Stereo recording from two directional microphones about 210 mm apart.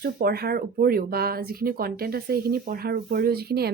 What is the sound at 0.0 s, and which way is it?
Speech, 45° right (ahead or behind).